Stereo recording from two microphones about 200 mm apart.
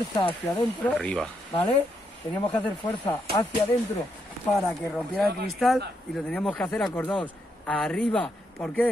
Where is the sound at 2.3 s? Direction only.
20° left (ahead or behind).